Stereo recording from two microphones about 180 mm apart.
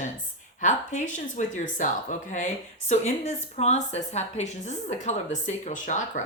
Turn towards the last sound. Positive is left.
turn(degrees=40)  # may be behind; listen again after turning